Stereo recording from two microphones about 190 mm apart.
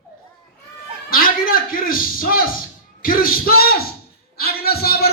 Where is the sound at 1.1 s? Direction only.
50° left (ahead or behind).